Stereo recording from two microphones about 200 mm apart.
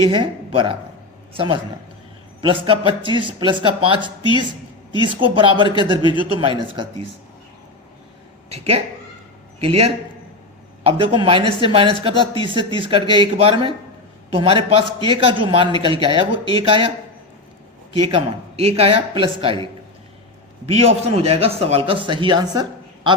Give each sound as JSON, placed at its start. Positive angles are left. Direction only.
{"t": 0.0, "sound": "a man's voice", "side_deg": -25}
{"t": 4.2, "sound": "a woman's voice", "side_deg": 25}
{"t": 5.0, "sound": "a man's voice", "side_deg": -25}
{"t": 8.4, "sound": "a man's voice", "side_deg": -30}
{"t": 17.9, "sound": "a man's voice", "side_deg": -25}
{"t": 20.7, "sound": "a man's voice", "side_deg": -30}